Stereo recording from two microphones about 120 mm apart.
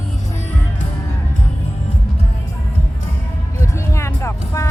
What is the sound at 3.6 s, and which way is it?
Vehicle, 20° left (ahead or behind).